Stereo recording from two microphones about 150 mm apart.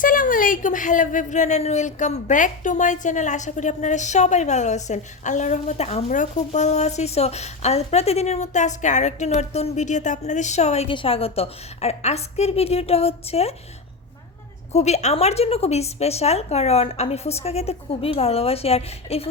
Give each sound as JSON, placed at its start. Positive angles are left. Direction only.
{"t": 0.0, "sound": "a woman's voice", "side_deg": 65}
{"t": 14.7, "sound": "a woman's voice", "side_deg": 45}